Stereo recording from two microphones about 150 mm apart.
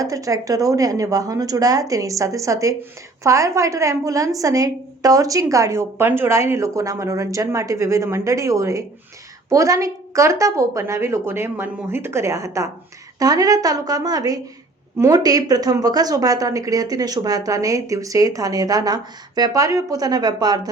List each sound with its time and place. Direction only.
0.0 s a woman's voice: 20° right (ahead or behind)